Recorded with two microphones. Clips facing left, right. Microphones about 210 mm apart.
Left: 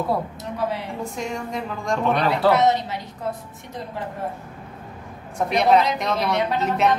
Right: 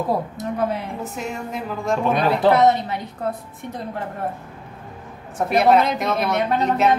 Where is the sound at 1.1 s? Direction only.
5° right (ahead or behind).